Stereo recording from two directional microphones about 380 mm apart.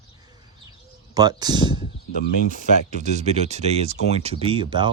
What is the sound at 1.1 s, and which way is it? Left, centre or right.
Speech, centre.